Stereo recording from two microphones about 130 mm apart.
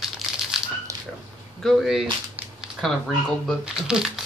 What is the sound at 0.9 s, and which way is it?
Dog, 25° right (ahead or behind).